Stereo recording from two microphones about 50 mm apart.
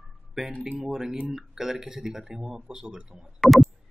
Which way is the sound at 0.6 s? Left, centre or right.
Centre.